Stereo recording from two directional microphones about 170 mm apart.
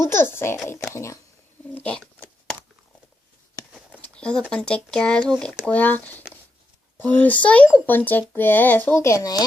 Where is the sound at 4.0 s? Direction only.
5° left (ahead or behind).